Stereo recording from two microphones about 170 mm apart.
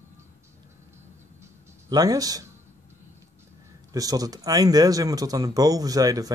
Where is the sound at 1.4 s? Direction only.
20° right (ahead or behind).